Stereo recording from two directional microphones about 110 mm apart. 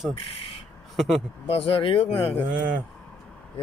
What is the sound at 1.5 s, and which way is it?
Speech, 60° left (ahead or behind).